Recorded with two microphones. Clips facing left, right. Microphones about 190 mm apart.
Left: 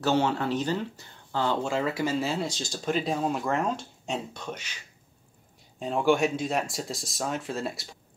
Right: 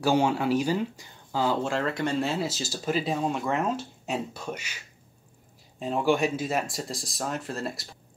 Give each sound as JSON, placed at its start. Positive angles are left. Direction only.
{"t": 0.0, "sound": "speech", "side_deg": -10}
{"t": 5.8, "sound": "speech", "side_deg": 0}